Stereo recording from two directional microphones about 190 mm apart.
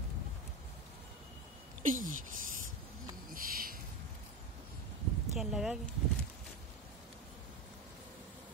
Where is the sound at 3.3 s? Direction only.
50° right (ahead or behind).